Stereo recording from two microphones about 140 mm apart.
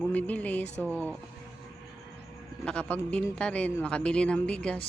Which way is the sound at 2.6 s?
10° left (ahead or behind).